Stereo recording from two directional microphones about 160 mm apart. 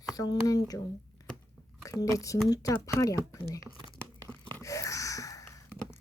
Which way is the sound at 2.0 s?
20° left (ahead or behind).